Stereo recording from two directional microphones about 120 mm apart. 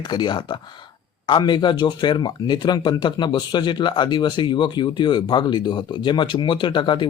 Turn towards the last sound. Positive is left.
turn(degrees=40)  # may be behind; listen again after turning